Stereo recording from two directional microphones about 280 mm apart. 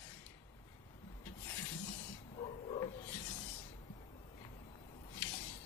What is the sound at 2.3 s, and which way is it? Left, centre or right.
Bow-wow, centre.